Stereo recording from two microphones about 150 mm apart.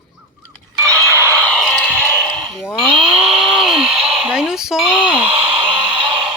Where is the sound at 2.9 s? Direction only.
35° right (ahead or behind).